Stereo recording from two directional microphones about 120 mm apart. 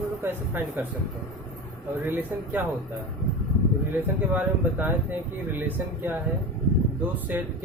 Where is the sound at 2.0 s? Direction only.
15° right (ahead or behind).